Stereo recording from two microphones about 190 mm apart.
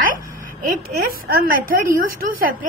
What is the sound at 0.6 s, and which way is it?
A woman's voice, 45° right (ahead or behind).